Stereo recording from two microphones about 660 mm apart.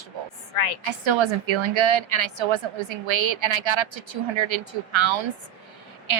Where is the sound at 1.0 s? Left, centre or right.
Right.